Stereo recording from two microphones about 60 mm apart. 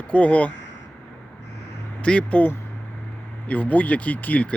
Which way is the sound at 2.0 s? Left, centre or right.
Centre.